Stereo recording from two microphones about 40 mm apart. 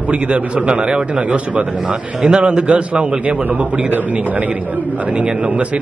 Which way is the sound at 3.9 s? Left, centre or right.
Right.